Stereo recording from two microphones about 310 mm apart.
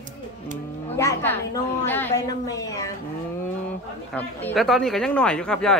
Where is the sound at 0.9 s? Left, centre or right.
Centre.